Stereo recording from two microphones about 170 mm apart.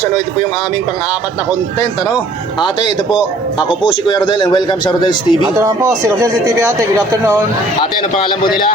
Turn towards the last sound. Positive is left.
turn(degrees=-15)  # may be behind; listen again after turning